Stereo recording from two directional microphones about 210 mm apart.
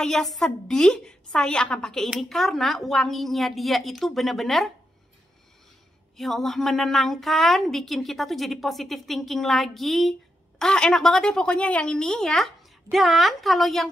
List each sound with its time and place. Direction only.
0.0 s a woman's voice: centre (ahead or behind)
6.1 s a woman's voice: centre (ahead or behind)